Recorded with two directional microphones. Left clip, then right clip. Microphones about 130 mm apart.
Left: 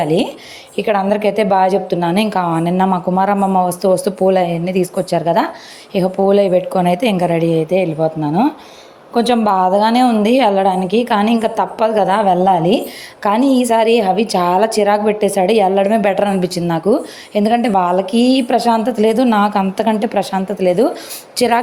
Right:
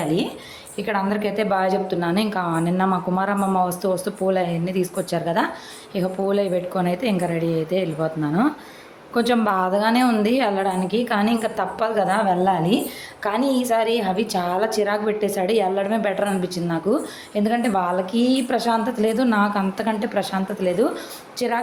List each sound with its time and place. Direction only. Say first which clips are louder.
0.0 s a woman's voice: left 8 dB; 55° left (ahead or behind)
21.3 s a woman's voice: left 10 dB; 90° left